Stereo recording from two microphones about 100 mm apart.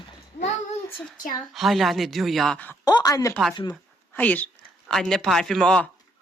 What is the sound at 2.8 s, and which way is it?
Speech, 40° left (ahead or behind).